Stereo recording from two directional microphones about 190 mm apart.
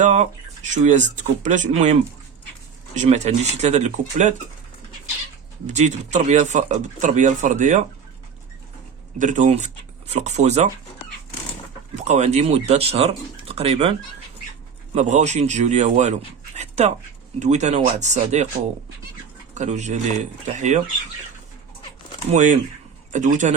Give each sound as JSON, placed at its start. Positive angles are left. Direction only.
{"t": 0.0, "sound": "speech", "side_deg": -40}
{"t": 5.6, "sound": "speech", "side_deg": -40}
{"t": 9.1, "sound": "speech", "side_deg": -40}
{"t": 12.0, "sound": "speech", "side_deg": -35}
{"t": 14.9, "sound": "speech", "side_deg": -40}
{"t": 19.5, "sound": "speech", "side_deg": -40}
{"t": 22.3, "sound": "speech", "side_deg": -40}